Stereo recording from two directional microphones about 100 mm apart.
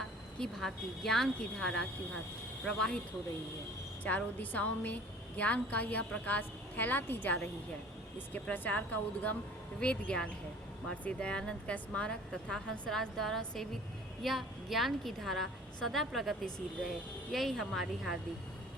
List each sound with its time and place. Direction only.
0.3 s a woman's voice: 5° left (ahead or behind)
4.0 s a woman's voice: 15° left (ahead or behind); by 18.2 s centre (ahead or behind)